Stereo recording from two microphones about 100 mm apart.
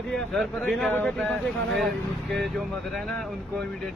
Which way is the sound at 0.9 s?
15° left (ahead or behind).